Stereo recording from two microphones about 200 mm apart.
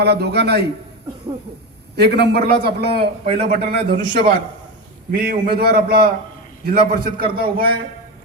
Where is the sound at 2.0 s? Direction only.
55° right (ahead or behind).